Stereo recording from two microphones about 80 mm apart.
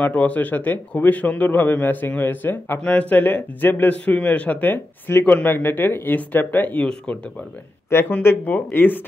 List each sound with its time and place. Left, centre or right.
0.0 s a man's voice: centre
2.8 s a man's voice: centre
8.2 s a man's voice: left